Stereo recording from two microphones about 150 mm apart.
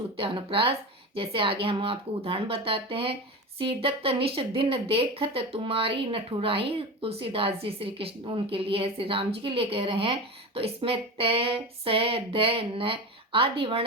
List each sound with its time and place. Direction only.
0.2 s speech: 35° right (ahead or behind)